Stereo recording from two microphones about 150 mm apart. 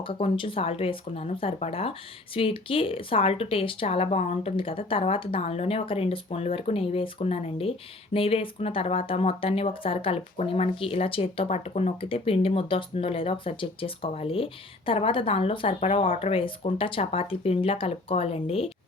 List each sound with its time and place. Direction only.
0.0 s speech: 35° left (ahead or behind)